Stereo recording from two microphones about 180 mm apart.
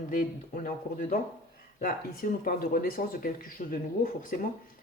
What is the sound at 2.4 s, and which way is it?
Speech, 50° left (ahead or behind).